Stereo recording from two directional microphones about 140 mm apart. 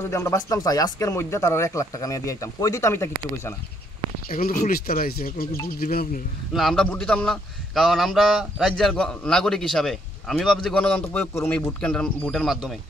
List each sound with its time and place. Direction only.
0.1 s speech: 20° left (ahead or behind)
4.3 s speech: 90° left
6.5 s a man's voice: centre (ahead or behind)